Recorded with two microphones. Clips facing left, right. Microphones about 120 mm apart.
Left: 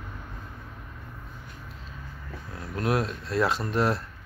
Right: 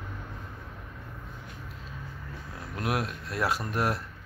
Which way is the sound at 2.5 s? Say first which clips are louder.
Left 4 dB; 10° right (ahead or behind).